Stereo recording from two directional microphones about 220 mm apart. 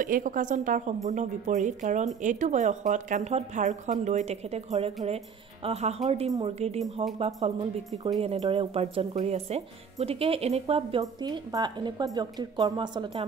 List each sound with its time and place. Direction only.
0.0 s speech: 35° right (ahead or behind); by 13.2 s 20° right (ahead or behind)